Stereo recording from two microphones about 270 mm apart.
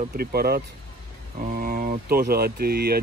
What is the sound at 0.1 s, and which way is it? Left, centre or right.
Speech, right.